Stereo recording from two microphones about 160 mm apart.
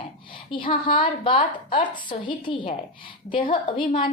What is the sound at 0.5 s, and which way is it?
A woman's voice, 35° left (ahead or behind).